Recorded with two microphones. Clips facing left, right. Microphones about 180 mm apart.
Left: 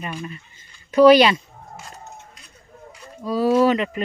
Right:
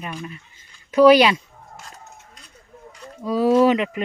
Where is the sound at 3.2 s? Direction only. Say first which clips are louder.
Right 1 dB; 20° right (ahead or behind).